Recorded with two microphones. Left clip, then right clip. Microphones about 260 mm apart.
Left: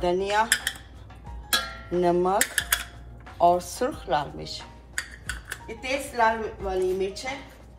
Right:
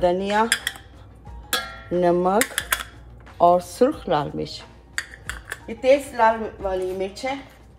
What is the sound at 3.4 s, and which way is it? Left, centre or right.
Speech, right.